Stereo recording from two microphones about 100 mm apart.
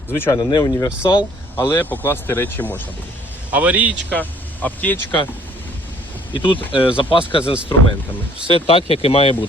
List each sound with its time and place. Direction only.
0.1 s speech: 20° left (ahead or behind)
0.3 s speech: 40° left (ahead or behind)
1.5 s speech: 20° left (ahead or behind)
3.5 s a man's voice: 15° right (ahead or behind)
4.1 s speech: 15° left (ahead or behind)
6.3 s speech: 60° left (ahead or behind)
8.4 s speech: 75° left (ahead or behind)